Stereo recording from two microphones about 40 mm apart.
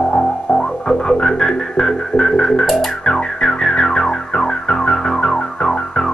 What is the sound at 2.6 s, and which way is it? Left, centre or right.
Music, centre.